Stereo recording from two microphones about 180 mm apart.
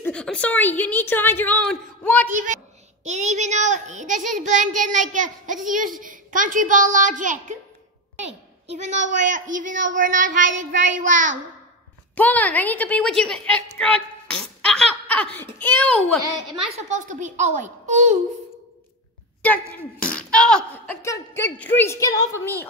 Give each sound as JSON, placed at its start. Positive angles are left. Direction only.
{"t": 0.0, "sound": "a woman's voice", "side_deg": 5}
{"t": 2.3, "sound": "a child's voice", "side_deg": -45}
{"t": 8.2, "sound": "a sound", "side_deg": -90}
{"t": 8.7, "sound": "a child's voice", "side_deg": -40}
{"t": 12.2, "sound": "a woman's voice", "side_deg": 10}
{"t": 16.9, "sound": "a child's voice", "side_deg": -45}
{"t": 20.0, "sound": "a woman's voice", "side_deg": 5}